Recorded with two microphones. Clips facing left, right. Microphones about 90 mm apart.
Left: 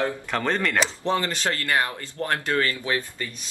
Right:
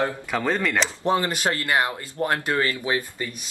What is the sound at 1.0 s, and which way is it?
Speech, 15° right (ahead or behind).